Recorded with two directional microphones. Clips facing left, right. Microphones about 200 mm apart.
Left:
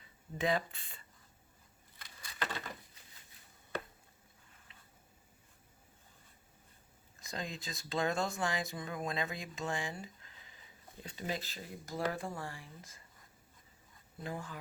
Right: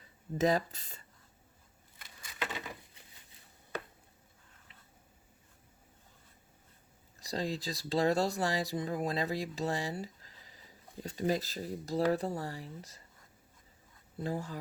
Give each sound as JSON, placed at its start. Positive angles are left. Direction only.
{"t": 0.3, "sound": "speech", "side_deg": -40}
{"t": 2.4, "sound": "a sound", "side_deg": -10}
{"t": 7.2, "sound": "speech", "side_deg": -35}
{"t": 14.2, "sound": "speech", "side_deg": -35}